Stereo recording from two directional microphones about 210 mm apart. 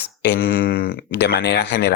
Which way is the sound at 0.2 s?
45° left (ahead or behind).